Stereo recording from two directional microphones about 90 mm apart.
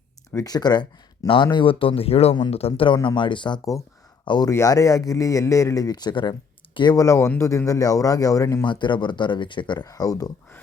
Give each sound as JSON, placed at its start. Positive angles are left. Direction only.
{"t": 0.4, "sound": "speech", "side_deg": 50}
{"t": 1.5, "sound": "speech", "side_deg": 70}
{"t": 4.5, "sound": "speech", "side_deg": 35}
{"t": 6.9, "sound": "speech", "side_deg": 35}
{"t": 8.6, "sound": "speech", "side_deg": 60}